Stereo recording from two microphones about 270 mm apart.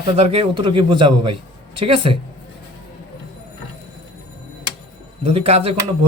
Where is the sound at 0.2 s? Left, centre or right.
Right.